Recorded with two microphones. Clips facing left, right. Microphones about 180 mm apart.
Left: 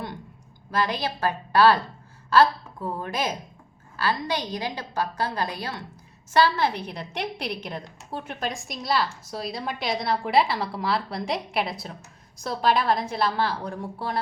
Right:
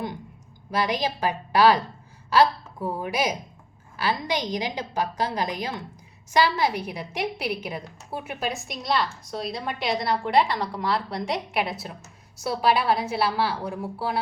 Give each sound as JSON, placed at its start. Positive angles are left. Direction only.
{"t": 0.7, "sound": "a woman's voice", "side_deg": -15}